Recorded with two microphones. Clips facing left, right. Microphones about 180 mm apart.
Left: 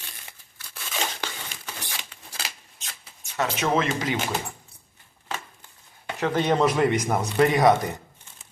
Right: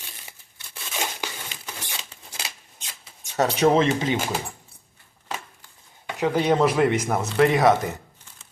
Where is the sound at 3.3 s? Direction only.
35° right (ahead or behind).